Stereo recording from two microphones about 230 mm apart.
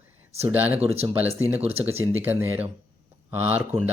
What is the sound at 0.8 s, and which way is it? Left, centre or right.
Speech, right.